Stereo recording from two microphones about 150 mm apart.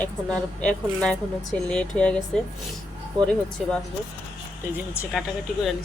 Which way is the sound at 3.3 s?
5° left (ahead or behind).